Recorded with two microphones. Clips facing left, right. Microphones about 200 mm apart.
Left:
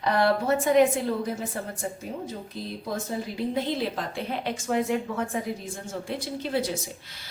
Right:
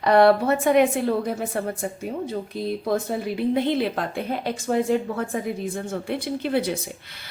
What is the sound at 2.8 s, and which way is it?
A woman's voice, 65° right (ahead or behind).